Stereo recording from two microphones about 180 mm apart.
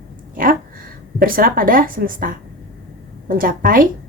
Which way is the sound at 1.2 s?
55° right (ahead or behind).